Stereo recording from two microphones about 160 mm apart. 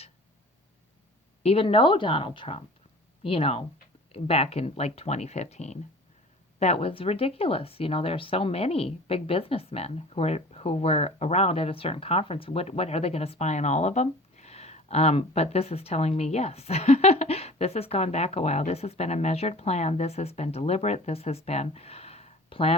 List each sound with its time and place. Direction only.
1.4 s speech: 40° left (ahead or behind)